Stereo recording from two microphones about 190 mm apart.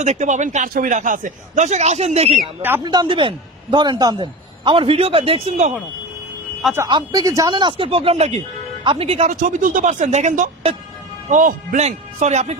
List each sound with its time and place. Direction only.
0.0 s speech: 40° right (ahead or behind)
2.6 s speech: 10° right (ahead or behind)
2.8 s a man's voice: 20° right (ahead or behind); by 5.7 s 40° right (ahead or behind)
6.7 s a man's voice: 20° right (ahead or behind)